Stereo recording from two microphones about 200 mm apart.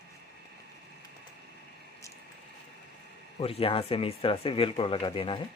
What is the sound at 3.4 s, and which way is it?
Speech, 30° left (ahead or behind).